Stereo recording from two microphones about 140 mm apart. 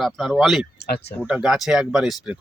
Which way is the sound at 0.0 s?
Centre (ahead or behind).